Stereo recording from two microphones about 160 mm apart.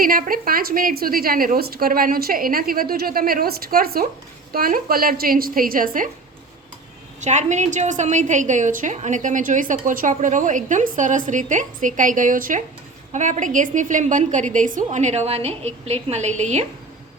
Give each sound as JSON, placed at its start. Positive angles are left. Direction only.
{"t": 0.0, "sound": "a woman's voice", "side_deg": -65}
{"t": 7.2, "sound": "a woman's voice", "side_deg": -50}